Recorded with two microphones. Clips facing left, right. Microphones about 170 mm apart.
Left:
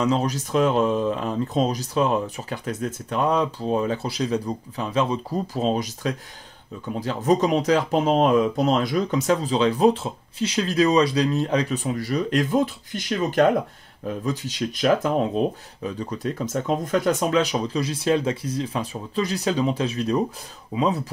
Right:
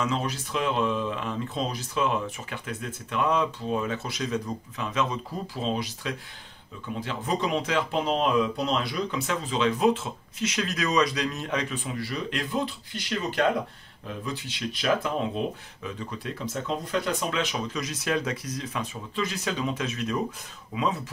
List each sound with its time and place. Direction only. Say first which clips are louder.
0.0 s speech: left 6 dB; 40° left (ahead or behind)